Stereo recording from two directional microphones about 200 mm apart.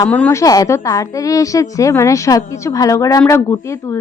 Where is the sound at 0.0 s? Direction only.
10° left (ahead or behind).